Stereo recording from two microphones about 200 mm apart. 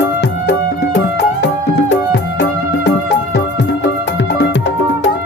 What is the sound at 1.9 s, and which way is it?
Music, 60° left (ahead or behind).